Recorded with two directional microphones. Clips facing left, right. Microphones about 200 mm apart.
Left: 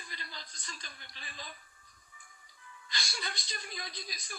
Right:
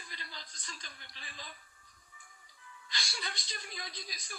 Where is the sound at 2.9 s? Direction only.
45° left (ahead or behind).